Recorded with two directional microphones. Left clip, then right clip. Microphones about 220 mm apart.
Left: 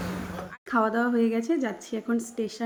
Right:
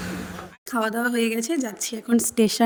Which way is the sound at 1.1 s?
50° right (ahead or behind).